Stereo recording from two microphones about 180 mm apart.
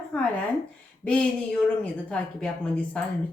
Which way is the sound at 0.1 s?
10° left (ahead or behind).